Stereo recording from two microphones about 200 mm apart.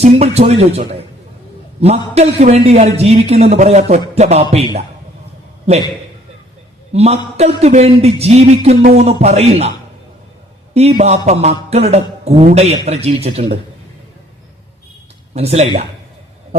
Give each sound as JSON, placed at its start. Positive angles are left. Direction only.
{"t": 0.0, "sound": "a man's voice", "side_deg": -35}
{"t": 6.9, "sound": "a man's voice", "side_deg": -30}
{"t": 10.8, "sound": "a man's voice", "side_deg": -30}
{"t": 15.4, "sound": "a man's voice", "side_deg": -30}